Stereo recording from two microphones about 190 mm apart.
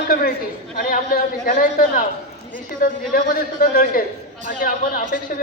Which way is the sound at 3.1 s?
45° left (ahead or behind).